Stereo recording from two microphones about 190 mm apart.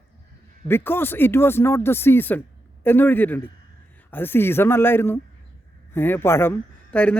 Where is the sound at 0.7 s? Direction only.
10° left (ahead or behind).